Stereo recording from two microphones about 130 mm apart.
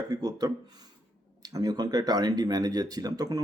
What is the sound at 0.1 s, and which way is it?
Speech, 30° right (ahead or behind).